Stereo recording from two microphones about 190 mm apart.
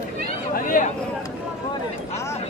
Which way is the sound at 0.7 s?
40° left (ahead or behind).